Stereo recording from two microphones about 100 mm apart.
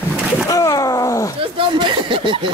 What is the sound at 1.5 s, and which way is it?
Speech, 60° right (ahead or behind).